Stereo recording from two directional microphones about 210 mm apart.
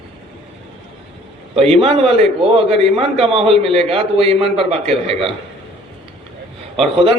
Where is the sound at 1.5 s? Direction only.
30° right (ahead or behind).